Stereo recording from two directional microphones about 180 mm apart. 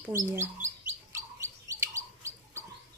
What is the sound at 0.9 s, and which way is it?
Bird, 15° right (ahead or behind).